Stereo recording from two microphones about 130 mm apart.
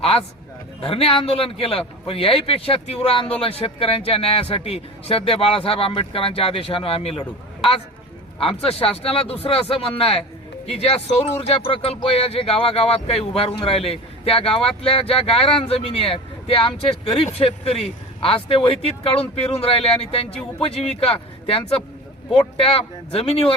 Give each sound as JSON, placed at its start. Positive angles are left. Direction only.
{"t": 0.8, "sound": "speech", "side_deg": 45}